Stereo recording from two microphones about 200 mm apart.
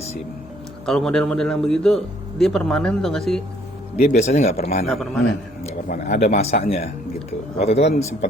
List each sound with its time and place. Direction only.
0.9 s a man's voice: 5° left (ahead or behind)
4.0 s speech: 35° left (ahead or behind)
4.9 s a man's voice: centre (ahead or behind)
5.6 s speech: 40° left (ahead or behind)